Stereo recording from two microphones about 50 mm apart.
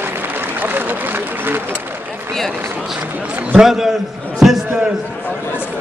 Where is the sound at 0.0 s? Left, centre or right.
Right.